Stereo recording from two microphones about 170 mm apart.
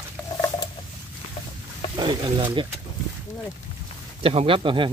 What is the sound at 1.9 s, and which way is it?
Speech, 25° right (ahead or behind).